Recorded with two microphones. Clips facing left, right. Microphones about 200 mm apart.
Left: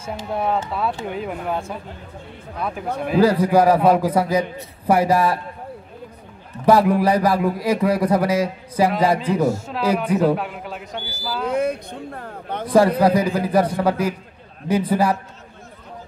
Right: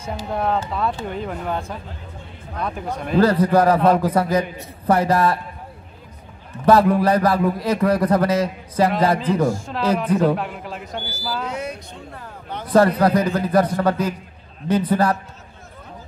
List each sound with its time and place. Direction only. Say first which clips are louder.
0.3 s a man's voice: even; 5° left (ahead or behind)
3.0 s a man's voice: even; 10° left (ahead or behind)
6.6 s a man's voice: even; 10° left (ahead or behind)
11.4 s speech: left 7 dB; 55° left (ahead or behind)
13.0 s a man's voice: left 1 dB; 10° left (ahead or behind)